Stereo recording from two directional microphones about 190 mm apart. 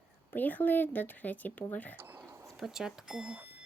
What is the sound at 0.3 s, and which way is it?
Speech, 10° left (ahead or behind).